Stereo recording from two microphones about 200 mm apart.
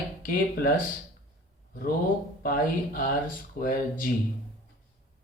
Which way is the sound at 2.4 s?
45° left (ahead or behind).